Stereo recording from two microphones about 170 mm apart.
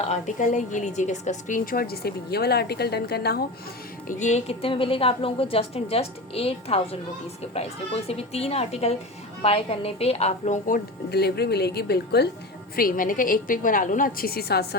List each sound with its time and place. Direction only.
0.1 s a woman's voice: 45° left (ahead or behind); by 3.4 s 70° left (ahead or behind)
4.1 s a woman's voice: 45° left (ahead or behind)
11.1 s speech: 70° left (ahead or behind)
12.7 s a woman's voice: 55° left (ahead or behind)